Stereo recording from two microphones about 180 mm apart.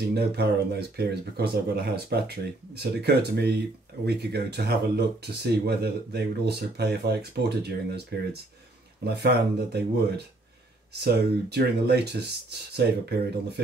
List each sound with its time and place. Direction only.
0.1 s speech: 65° right (ahead or behind)